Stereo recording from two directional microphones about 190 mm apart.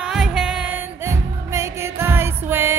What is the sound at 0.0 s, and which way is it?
Music, 5° right (ahead or behind).